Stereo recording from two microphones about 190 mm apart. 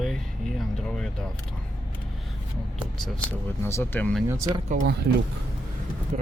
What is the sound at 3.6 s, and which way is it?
Speech, 10° left (ahead or behind).